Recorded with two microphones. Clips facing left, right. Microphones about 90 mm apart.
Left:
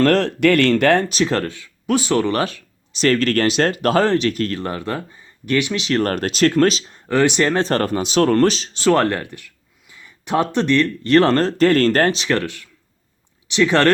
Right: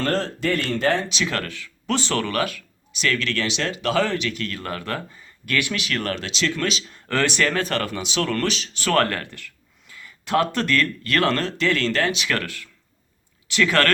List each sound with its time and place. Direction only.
0.0 s speech: 70° left (ahead or behind)
1.0 s speech: 40° left (ahead or behind); by 1.7 s 25° left (ahead or behind)
1.9 s speech: 10° left (ahead or behind)
2.3 s speech: 30° left (ahead or behind)
4.5 s speech: 25° left (ahead or behind)
6.0 s speech: 45° left (ahead or behind)
6.9 s speech: 15° left (ahead or behind); by 12.1 s 45° left (ahead or behind)
12.1 s speech: 30° left (ahead or behind)